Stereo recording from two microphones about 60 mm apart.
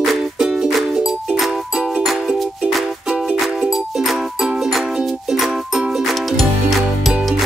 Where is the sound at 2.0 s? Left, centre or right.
Centre.